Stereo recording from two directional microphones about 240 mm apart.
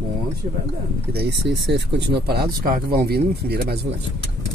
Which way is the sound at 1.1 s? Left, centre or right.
Right.